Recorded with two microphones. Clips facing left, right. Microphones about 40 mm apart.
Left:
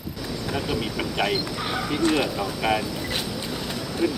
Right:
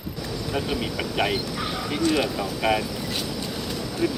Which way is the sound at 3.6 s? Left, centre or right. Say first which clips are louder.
Left 1 dB; centre.